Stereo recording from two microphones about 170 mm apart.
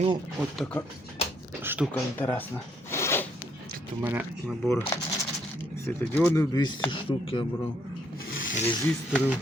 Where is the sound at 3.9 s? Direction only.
10° right (ahead or behind).